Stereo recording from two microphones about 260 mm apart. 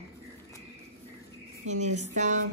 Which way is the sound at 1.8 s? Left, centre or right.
Right.